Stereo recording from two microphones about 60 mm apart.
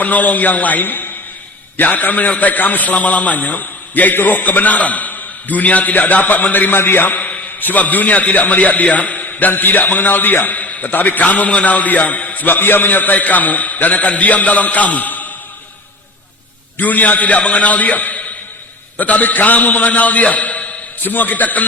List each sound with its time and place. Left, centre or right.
0.0 s a man's voice: left
16.7 s a man's voice: left